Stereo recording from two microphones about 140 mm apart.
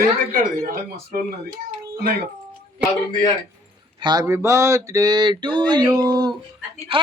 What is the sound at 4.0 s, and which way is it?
Speech, 35° right (ahead or behind).